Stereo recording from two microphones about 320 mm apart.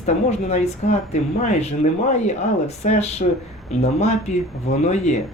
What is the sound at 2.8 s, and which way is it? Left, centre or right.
Speech, centre.